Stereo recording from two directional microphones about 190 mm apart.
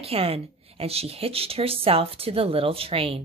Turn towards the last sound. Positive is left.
turn(degrees=-30)  # may be behind; listen again after turning